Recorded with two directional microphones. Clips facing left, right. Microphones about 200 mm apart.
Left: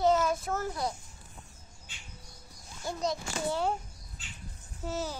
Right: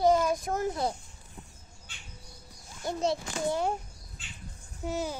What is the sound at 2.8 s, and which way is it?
Speech, 30° right (ahead or behind).